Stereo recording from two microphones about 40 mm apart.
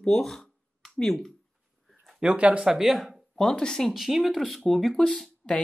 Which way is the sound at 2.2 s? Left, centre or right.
Right.